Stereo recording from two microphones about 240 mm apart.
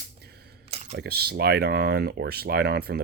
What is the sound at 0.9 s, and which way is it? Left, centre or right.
Speech, right.